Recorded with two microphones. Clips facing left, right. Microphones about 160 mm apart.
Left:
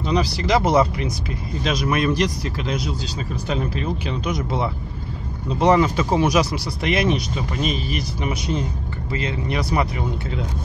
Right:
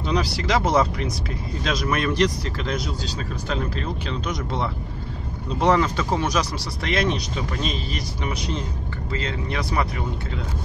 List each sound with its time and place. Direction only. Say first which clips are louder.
0.0 s a man's voice: left 2 dB; centre (ahead or behind)